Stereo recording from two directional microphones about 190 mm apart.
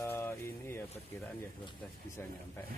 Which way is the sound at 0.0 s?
10° left (ahead or behind).